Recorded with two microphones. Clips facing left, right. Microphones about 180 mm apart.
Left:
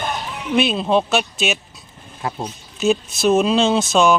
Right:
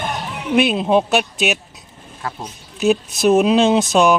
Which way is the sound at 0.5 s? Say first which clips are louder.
Right 2 dB; 15° right (ahead or behind).